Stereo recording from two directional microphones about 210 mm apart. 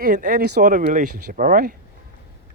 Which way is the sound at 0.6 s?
35° right (ahead or behind).